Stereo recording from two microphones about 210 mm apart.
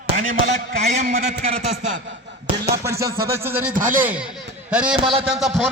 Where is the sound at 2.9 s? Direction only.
45° right (ahead or behind).